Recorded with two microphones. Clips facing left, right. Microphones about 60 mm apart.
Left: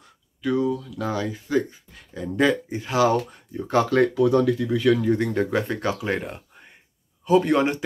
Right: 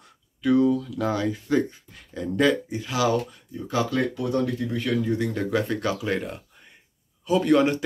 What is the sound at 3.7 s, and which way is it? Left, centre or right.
Speech, left.